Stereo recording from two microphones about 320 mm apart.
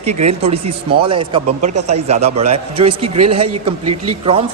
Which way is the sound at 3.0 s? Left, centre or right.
Right.